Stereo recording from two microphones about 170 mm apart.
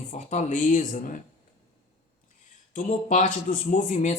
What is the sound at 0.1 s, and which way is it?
Speech, 45° left (ahead or behind).